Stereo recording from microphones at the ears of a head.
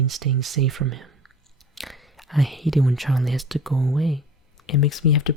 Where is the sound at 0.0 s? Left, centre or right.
Right.